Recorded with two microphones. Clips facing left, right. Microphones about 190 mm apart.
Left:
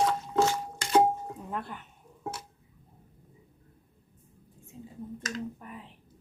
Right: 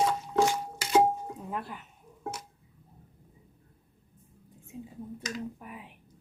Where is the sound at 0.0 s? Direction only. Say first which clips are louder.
Even; 10° right (ahead or behind).